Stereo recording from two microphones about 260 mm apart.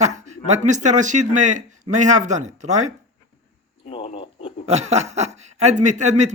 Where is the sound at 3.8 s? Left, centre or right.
Left.